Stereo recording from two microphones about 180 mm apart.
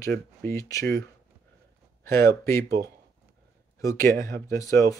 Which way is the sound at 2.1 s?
15° left (ahead or behind).